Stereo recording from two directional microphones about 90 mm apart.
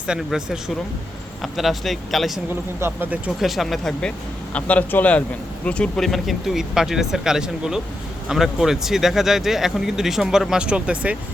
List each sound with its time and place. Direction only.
0.1 s speech: 5° right (ahead or behind)
2.8 s speech: 20° right (ahead or behind)
3.4 s speech: centre (ahead or behind)
4.5 s a man's voice: 15° left (ahead or behind)
6.1 s speech: centre (ahead or behind)